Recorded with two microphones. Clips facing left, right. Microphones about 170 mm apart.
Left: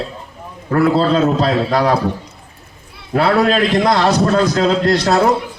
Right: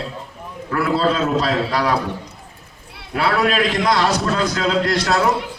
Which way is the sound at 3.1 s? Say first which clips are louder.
Left 5 dB; 30° left (ahead or behind).